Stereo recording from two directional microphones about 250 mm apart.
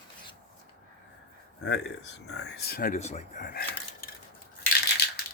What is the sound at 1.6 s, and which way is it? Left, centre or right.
Speech, left.